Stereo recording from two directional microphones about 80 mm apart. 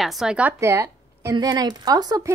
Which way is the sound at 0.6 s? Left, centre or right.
Right.